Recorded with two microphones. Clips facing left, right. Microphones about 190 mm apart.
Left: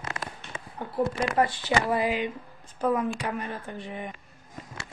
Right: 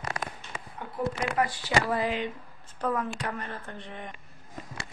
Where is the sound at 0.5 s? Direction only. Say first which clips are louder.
Left 7 dB; 30° left (ahead or behind).